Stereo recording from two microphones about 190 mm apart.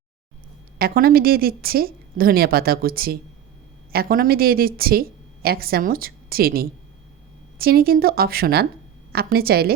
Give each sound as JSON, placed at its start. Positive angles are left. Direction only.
{"t": 0.8, "sound": "a woman's voice", "side_deg": -50}